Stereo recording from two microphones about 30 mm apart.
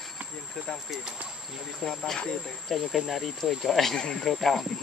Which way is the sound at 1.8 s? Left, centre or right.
Centre.